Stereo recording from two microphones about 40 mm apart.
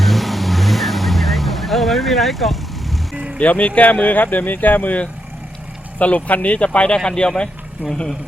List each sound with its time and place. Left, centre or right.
0.0 s vehicle: centre
3.4 s speech: left